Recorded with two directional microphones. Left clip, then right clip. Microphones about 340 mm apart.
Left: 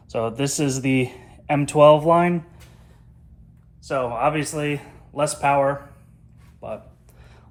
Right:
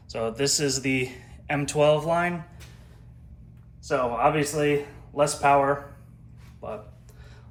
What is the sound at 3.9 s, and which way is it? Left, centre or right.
Speech, left.